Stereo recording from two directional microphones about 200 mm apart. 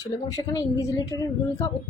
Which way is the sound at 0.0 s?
15° left (ahead or behind).